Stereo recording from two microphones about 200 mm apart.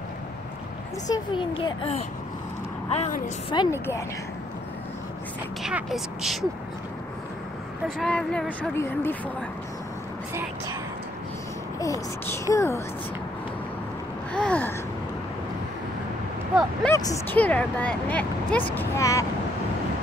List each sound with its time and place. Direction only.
1.0 s speech: 20° left (ahead or behind)
3.5 s speech: 15° left (ahead or behind)
5.6 s speech: 5° right (ahead or behind)
8.0 s speech: 5° left (ahead or behind)
11.8 s speech: 15° left (ahead or behind)
14.3 s a sound: 5° left (ahead or behind)
16.8 s speech: 15° left (ahead or behind)